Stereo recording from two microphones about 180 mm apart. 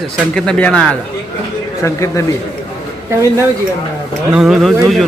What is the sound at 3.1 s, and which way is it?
Speech, 15° right (ahead or behind).